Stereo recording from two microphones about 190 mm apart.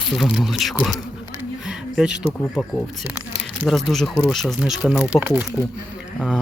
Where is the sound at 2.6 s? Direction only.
5° right (ahead or behind).